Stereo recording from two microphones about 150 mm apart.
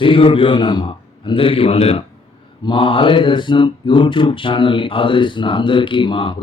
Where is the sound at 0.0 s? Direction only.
35° left (ahead or behind).